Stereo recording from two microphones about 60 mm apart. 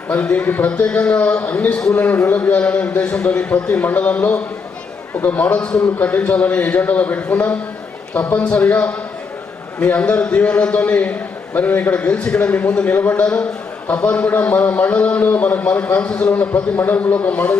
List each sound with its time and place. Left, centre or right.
0.1 s a man's voice: left